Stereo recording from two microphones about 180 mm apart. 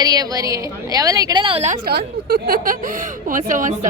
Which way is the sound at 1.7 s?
60° right (ahead or behind).